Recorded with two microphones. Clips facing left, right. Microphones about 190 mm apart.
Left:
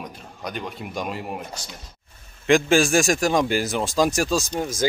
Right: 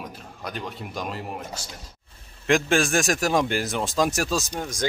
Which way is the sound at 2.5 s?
Centre (ahead or behind).